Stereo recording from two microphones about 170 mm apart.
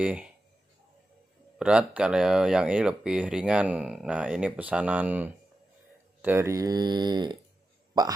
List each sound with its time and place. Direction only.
0.0 s speech: 5° right (ahead or behind)
1.6 s speech: 5° right (ahead or behind); by 7.3 s 25° right (ahead or behind)